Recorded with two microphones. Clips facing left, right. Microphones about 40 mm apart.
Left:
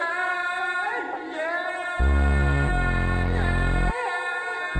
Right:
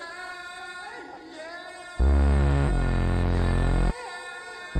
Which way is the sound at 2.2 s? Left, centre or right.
Left.